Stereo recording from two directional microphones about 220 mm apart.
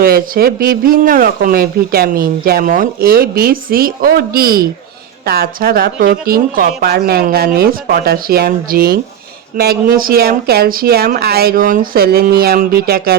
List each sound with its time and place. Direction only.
0.0 s speech: 40° right (ahead or behind)